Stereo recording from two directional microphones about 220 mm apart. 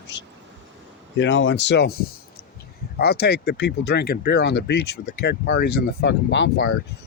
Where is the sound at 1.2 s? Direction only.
55° left (ahead or behind).